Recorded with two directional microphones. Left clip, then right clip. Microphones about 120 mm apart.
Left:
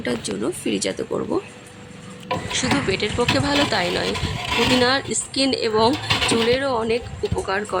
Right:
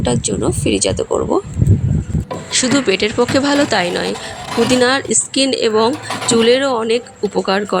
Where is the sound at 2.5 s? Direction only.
35° right (ahead or behind).